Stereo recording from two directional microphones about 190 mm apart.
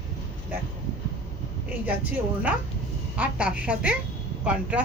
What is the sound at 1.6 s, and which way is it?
A woman's voice, 10° right (ahead or behind).